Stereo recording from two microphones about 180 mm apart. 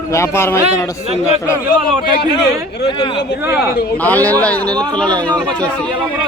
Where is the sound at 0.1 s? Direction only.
15° left (ahead or behind).